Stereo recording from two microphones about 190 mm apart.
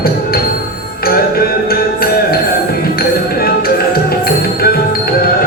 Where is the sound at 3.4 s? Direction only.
55° left (ahead or behind).